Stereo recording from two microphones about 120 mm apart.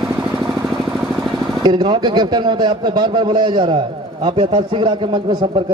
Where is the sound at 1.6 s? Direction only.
40° right (ahead or behind).